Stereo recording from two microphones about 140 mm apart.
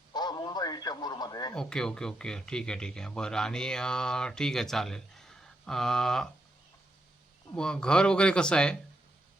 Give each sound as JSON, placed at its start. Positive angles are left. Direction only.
{"t": 0.1, "sound": "radio", "side_deg": 30}
{"t": 1.5, "sound": "speech", "side_deg": 5}
{"t": 7.5, "sound": "speech", "side_deg": 5}